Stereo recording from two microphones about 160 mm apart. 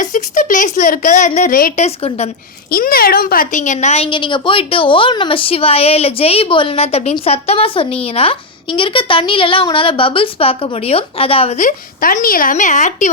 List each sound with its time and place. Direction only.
0.0 s a woman's voice: 55° left (ahead or behind)
1.7 s a woman's voice: 40° left (ahead or behind)
2.6 s a woman's voice: 65° left (ahead or behind); by 11.6 s 40° left (ahead or behind)
11.6 s a woman's voice: 60° left (ahead or behind)